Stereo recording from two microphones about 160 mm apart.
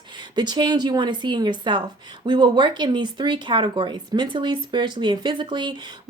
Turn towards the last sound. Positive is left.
turn(degrees=-30)  # may be behind; listen again after turning